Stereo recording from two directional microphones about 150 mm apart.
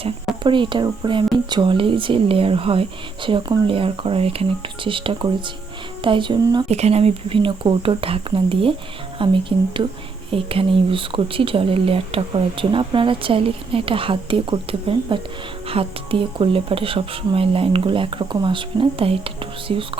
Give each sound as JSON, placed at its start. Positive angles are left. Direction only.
{"t": 0.4, "sound": "speech", "side_deg": -30}
{"t": 6.7, "sound": "speech", "side_deg": -45}